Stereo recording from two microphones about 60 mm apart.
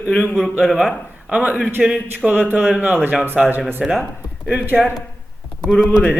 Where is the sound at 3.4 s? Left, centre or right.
Centre.